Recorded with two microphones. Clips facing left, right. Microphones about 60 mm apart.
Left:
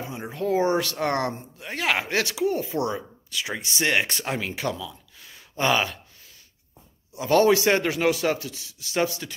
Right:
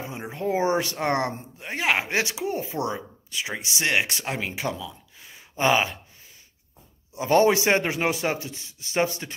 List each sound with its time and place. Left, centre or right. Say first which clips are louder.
0.1 s speech: left 2 dB; right
4.7 s a sound: even; centre
7.2 s speech: even; right